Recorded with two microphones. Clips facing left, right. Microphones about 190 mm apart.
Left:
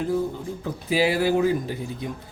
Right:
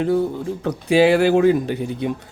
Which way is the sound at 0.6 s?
75° right (ahead or behind).